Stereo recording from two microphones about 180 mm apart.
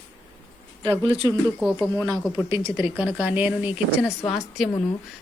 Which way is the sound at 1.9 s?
15° right (ahead or behind).